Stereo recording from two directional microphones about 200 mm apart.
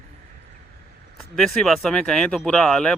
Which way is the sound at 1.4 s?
Centre (ahead or behind).